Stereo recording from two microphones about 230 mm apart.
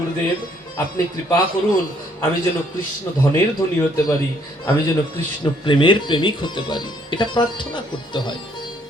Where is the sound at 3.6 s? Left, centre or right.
Centre.